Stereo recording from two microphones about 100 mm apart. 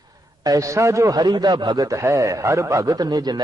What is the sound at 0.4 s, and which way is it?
A man's voice, 35° right (ahead or behind).